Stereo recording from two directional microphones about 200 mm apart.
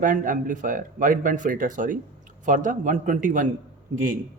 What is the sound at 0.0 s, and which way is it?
Speech, 40° right (ahead or behind).